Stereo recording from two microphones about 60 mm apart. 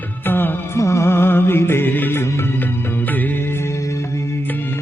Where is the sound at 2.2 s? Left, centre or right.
Left.